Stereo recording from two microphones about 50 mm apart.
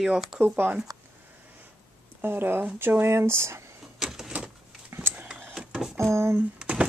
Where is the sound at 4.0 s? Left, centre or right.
Centre.